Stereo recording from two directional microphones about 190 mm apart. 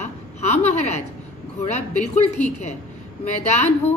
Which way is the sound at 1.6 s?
35° left (ahead or behind).